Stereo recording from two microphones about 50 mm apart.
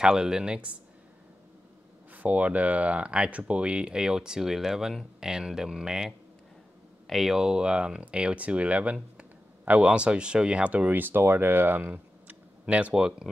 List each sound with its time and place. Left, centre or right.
0.0 s speech: centre
2.1 s speech: right; by 7.3 s centre
7.3 s speech: centre
10.9 s speech: right
11.9 s a sound: right